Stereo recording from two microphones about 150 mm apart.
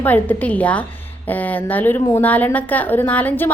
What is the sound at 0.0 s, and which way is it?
A woman's voice, 10° left (ahead or behind).